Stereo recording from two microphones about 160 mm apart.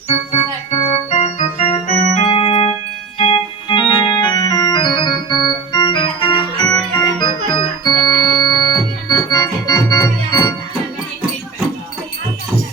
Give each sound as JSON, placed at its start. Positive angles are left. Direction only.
{"t": 0.1, "sound": "organ", "side_deg": 45}
{"t": 2.2, "sound": "music", "side_deg": 35}
{"t": 3.2, "sound": "organ", "side_deg": 35}